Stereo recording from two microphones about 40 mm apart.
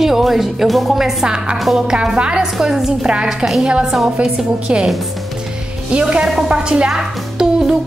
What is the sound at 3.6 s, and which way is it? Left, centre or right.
A woman's voice, centre.